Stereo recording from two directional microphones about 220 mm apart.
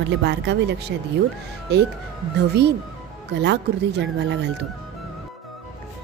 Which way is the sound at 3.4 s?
50° right (ahead or behind).